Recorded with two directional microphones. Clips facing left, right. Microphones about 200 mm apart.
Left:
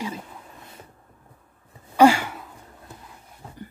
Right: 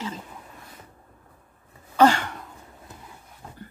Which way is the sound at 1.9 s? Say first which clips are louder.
Left 3 dB; 10° left (ahead or behind).